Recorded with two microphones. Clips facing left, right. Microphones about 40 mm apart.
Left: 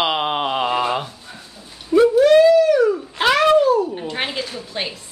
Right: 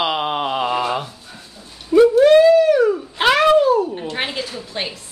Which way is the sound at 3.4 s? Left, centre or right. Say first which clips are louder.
Even; centre.